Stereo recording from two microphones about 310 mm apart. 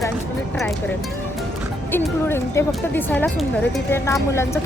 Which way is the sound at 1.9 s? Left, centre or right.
Centre.